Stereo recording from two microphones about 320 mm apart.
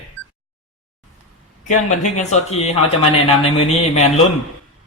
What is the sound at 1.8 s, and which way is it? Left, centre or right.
A man's voice, left.